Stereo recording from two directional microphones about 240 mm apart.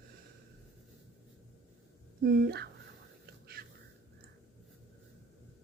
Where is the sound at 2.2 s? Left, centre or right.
Right.